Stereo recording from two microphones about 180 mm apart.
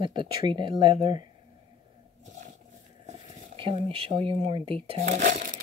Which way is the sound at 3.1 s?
30° right (ahead or behind).